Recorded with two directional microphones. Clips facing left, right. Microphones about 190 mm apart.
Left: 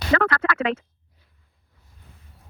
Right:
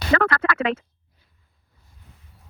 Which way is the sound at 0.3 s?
10° right (ahead or behind).